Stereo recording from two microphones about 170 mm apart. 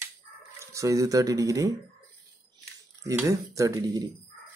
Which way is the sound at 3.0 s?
20° right (ahead or behind).